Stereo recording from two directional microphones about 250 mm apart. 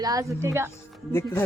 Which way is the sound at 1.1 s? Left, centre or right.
Centre.